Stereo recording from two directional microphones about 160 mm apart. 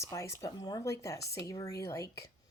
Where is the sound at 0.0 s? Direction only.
20° left (ahead or behind).